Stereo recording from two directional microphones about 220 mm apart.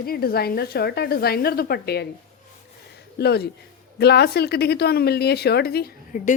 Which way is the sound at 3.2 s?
45° left (ahead or behind).